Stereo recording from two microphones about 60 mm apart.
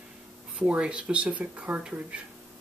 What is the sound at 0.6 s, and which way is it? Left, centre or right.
Speech, centre.